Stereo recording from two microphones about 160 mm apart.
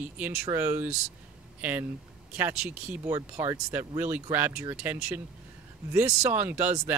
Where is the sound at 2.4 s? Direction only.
10° right (ahead or behind).